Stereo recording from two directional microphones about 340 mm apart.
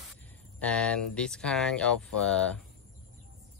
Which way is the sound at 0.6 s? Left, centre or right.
Centre.